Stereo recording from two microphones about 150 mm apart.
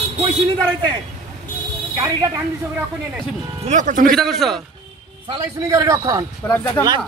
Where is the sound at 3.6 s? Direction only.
55° right (ahead or behind).